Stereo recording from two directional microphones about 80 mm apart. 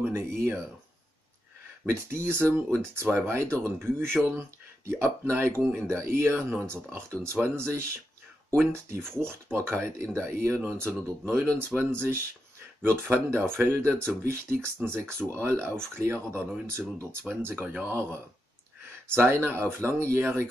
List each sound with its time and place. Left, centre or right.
0.1 s speech: right
1.9 s speech: right
9.0 s speech: centre
9.3 s speech: right
19.1 s speech: right